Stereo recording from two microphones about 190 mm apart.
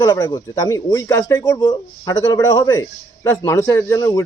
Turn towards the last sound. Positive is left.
turn(degrees=20)  # may be behind; listen again after turning